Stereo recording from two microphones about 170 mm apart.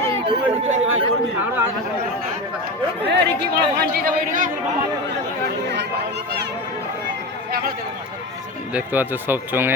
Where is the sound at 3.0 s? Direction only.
75° right (ahead or behind); by 4.5 s 55° right (ahead or behind).